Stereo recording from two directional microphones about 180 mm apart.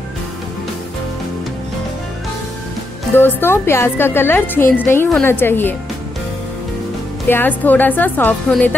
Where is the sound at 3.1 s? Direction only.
10° left (ahead or behind).